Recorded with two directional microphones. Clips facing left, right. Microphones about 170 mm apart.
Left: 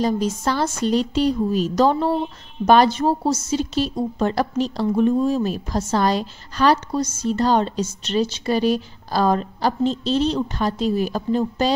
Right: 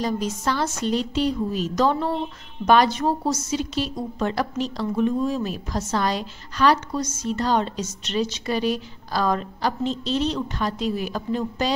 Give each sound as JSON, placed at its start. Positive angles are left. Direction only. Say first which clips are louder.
{"t": 0.0, "sound": "a woman's voice", "louder": "left 4 dB", "side_deg": 35}